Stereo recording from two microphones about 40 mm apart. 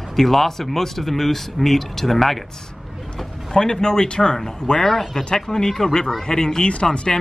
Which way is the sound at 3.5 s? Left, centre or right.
Centre.